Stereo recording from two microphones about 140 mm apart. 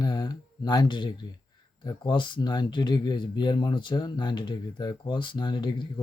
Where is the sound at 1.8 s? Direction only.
30° left (ahead or behind).